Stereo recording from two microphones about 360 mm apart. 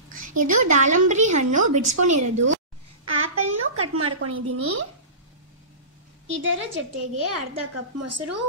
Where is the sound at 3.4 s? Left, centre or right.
Right.